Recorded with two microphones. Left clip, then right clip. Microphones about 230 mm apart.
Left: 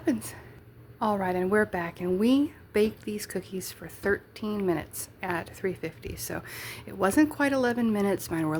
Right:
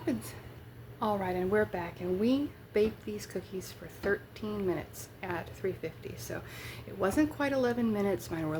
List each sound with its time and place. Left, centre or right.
0.0 s a woman's voice: left